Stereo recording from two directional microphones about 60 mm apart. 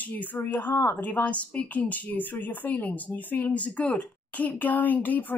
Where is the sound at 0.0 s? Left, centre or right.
Left.